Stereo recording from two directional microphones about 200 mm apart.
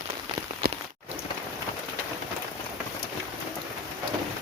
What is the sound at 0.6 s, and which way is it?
Rain on surface, 50° right (ahead or behind).